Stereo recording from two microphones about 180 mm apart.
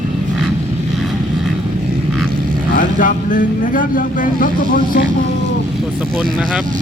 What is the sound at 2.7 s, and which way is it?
Speech, 50° left (ahead or behind).